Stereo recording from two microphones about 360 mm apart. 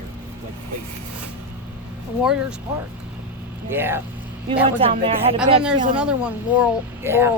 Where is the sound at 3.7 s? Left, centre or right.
Centre.